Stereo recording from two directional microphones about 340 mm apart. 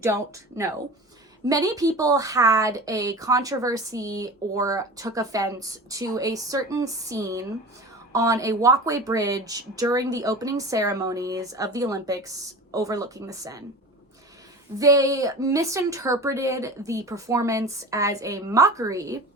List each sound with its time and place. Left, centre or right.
0.0 s a woman's voice: centre
14.8 s a woman's voice: centre